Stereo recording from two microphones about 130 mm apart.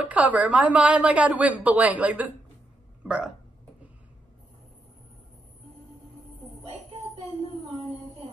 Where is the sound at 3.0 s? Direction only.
10° right (ahead or behind).